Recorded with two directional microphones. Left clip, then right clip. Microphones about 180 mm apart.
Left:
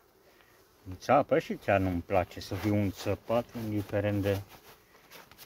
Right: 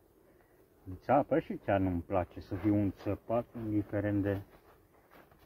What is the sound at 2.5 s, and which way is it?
Speech, 55° left (ahead or behind).